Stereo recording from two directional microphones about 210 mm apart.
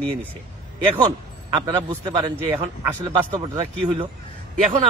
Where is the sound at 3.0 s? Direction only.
25° right (ahead or behind).